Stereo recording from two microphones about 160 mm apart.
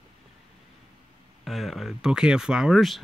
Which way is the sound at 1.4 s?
Centre (ahead or behind).